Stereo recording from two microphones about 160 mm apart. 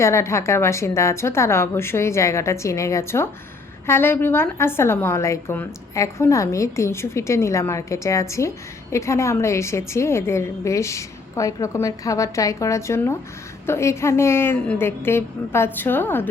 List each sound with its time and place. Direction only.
0.0 s a woman's voice: 15° left (ahead or behind)